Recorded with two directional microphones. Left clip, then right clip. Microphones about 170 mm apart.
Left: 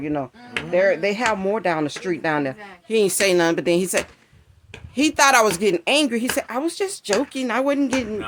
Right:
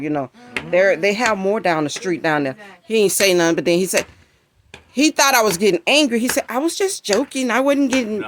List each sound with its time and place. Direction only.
0.0 s speech: 35° right (ahead or behind)